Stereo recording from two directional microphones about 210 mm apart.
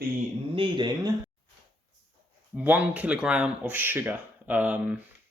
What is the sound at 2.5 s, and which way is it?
Speech, 10° right (ahead or behind).